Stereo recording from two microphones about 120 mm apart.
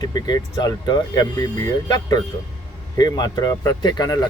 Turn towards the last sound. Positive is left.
turn(degrees=35)  # may be behind; listen again after turning